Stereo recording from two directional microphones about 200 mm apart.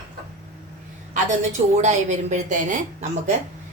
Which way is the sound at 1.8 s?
35° right (ahead or behind).